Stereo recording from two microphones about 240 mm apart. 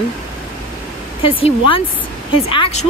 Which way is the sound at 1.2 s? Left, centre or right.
Left.